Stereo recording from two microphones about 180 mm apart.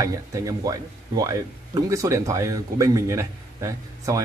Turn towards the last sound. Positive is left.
turn(degrees=-15)  # may be behind; listen again after turning